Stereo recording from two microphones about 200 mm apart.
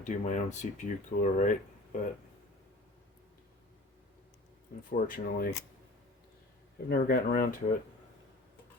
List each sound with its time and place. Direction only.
0.0 s speech: 40° left (ahead or behind)
4.9 s speech: 45° left (ahead or behind)
6.8 s speech: 50° left (ahead or behind)